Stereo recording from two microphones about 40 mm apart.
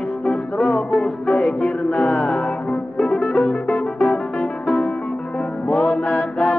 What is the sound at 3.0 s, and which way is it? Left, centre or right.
Music, left.